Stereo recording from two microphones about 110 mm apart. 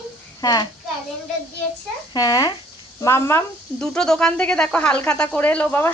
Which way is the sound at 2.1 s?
35° left (ahead or behind).